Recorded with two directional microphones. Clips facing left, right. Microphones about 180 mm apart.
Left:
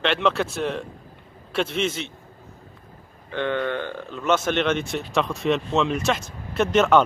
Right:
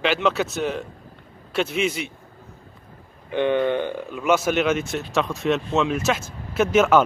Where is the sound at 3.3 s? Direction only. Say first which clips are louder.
Right 5 dB; 15° right (ahead or behind).